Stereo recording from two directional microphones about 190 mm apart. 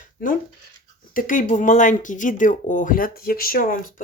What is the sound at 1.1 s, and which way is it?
Speech, 45° left (ahead or behind).